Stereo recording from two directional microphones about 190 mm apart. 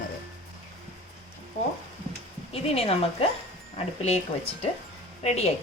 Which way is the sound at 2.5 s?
30° left (ahead or behind).